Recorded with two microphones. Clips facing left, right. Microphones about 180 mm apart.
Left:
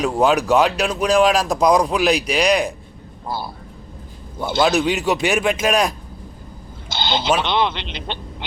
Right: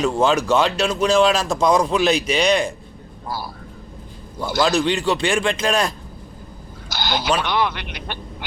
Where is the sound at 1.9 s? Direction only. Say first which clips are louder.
Even; centre (ahead or behind).